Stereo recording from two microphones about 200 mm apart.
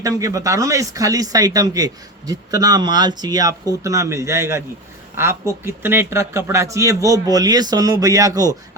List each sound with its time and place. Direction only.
0.0 s speech: 15° right (ahead or behind)